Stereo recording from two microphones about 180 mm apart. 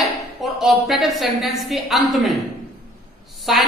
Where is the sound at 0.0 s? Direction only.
Centre (ahead or behind).